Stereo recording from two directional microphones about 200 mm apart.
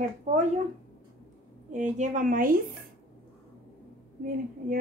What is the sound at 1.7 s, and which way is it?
Speech, 35° right (ahead or behind).